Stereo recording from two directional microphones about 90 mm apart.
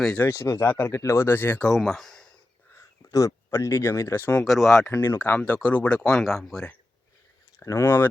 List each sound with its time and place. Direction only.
0.2 s speech: 30° left (ahead or behind)
1.6 s speech: centre (ahead or behind)
3.1 s speech: 35° left (ahead or behind)
4.4 s speech: centre (ahead or behind)
4.9 s speech: 25° left (ahead or behind)
5.4 s speech: 15° left (ahead or behind)
7.6 s speech: 35° left (ahead or behind)